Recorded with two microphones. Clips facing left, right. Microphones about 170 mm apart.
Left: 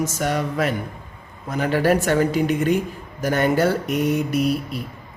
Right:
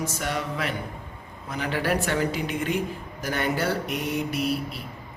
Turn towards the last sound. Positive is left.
turn(degrees=45)  # may be behind; listen again after turning